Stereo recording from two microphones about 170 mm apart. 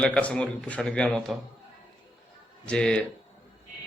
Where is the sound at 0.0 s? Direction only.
5° left (ahead or behind).